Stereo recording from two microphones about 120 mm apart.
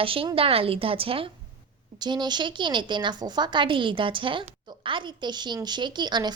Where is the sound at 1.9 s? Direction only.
35° right (ahead or behind).